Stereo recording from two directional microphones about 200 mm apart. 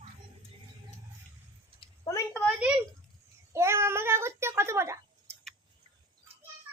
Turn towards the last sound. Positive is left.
turn(degrees=-15)  # may be behind; listen again after turning